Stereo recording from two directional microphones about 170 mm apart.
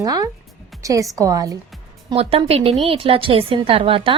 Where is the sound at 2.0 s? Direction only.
35° right (ahead or behind).